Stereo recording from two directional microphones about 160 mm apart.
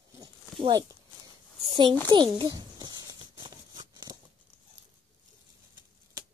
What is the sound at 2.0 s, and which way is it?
Speech, 30° right (ahead or behind).